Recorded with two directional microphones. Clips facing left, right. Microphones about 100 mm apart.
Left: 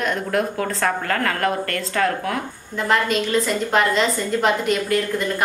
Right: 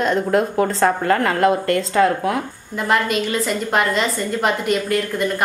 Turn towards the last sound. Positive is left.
turn(degrees=0)  # may be behind; listen again after turning